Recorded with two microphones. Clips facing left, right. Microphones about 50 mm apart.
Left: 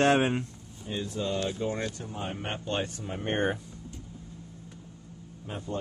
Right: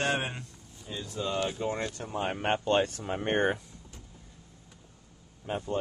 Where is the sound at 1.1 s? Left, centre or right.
Centre.